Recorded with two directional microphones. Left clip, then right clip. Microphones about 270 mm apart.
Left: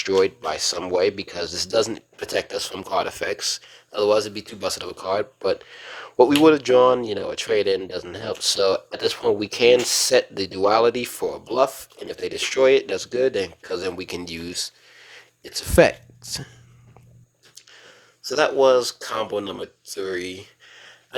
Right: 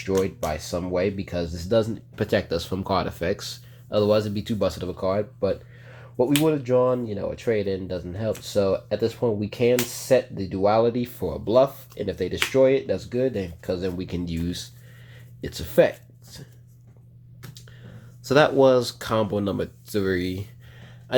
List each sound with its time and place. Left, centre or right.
0.0 s speech: left
15.1 s a sound: centre
18.3 s speech: centre